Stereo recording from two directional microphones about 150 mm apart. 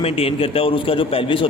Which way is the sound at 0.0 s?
40° left (ahead or behind).